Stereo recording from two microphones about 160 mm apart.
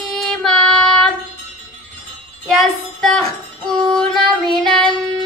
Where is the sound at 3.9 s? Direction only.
5° left (ahead or behind).